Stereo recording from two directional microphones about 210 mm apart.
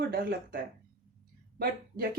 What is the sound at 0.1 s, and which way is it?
Speech, 45° right (ahead or behind).